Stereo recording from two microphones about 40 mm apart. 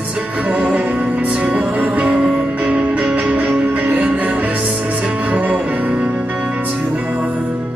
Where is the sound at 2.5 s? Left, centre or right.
Right.